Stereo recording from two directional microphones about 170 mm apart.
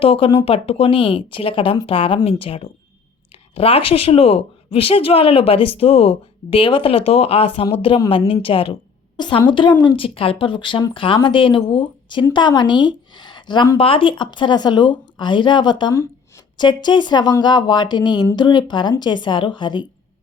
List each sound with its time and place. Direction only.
0.0 s a woman's voice: 35° left (ahead or behind)